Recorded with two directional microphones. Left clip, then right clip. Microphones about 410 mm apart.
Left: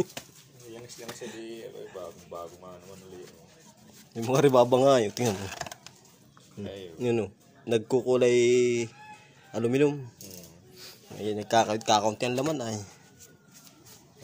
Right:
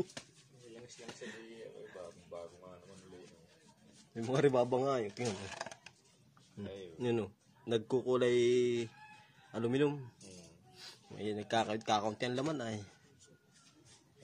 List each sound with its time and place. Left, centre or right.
4.1 s speech: right
7.0 s speech: right
11.1 s speech: right